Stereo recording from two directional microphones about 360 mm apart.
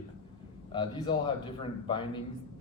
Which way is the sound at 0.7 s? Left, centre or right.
Centre.